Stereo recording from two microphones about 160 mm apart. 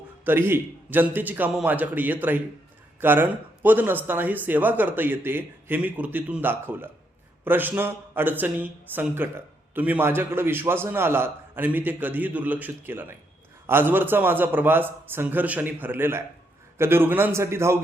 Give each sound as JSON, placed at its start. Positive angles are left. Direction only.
{"t": 0.3, "sound": "speech", "side_deg": -15}